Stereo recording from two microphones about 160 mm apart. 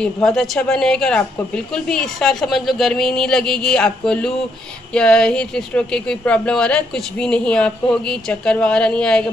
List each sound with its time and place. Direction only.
0.0 s speech: 5° left (ahead or behind)